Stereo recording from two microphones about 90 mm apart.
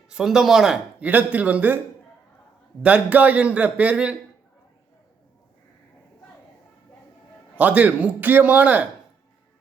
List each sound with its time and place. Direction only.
0.1 s speech: 5° right (ahead or behind)
1.0 s a man's voice: 15° right (ahead or behind)
2.8 s a man's voice: 15° right (ahead or behind)
7.5 s a man's voice: 15° right (ahead or behind)